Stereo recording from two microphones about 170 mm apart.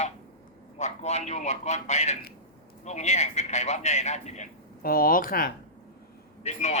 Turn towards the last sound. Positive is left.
turn(degrees=40)  # may be behind; listen again after turning